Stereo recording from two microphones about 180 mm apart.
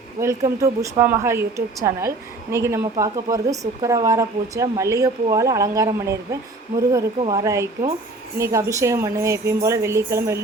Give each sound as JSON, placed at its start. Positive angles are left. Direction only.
{"t": 0.2, "sound": "speech", "side_deg": -15}
{"t": 7.2, "sound": "speech", "side_deg": -20}